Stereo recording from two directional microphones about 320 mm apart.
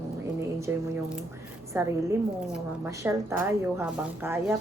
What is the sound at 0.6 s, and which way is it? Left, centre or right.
A woman's voice, centre.